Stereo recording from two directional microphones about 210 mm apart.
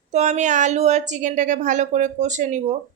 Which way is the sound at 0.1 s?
35° right (ahead or behind).